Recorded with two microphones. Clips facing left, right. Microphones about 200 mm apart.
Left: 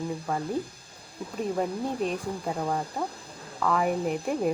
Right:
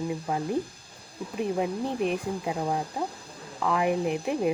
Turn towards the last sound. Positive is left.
turn(degrees=-5)  # may be behind; listen again after turning